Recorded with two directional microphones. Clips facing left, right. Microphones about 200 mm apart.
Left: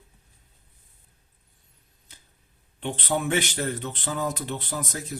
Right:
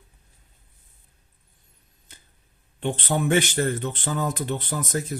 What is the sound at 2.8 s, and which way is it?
Speech, 50° right (ahead or behind).